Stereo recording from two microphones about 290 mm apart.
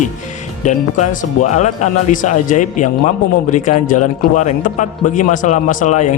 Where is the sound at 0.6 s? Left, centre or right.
Left.